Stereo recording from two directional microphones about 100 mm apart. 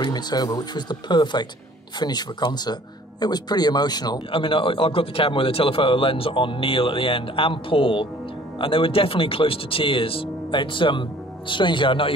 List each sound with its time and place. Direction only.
0.0 s speech: 45° left (ahead or behind)
4.3 s a man's voice: 60° left (ahead or behind)